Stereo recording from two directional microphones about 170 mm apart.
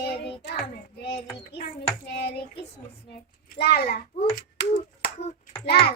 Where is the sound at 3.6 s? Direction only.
65° left (ahead or behind).